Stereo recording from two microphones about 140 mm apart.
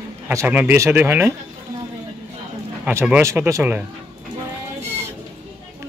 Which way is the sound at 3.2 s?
20° right (ahead or behind).